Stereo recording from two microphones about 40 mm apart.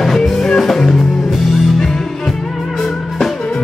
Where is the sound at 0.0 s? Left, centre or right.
Centre.